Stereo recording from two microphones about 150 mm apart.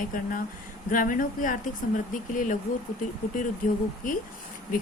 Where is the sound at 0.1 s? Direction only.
65° left (ahead or behind).